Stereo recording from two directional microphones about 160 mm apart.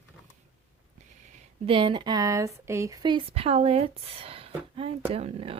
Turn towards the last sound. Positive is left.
turn(degrees=-35)  # may be behind; listen again after turning